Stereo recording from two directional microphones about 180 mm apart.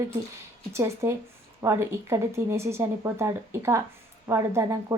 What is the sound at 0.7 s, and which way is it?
A woman's voice, 15° right (ahead or behind).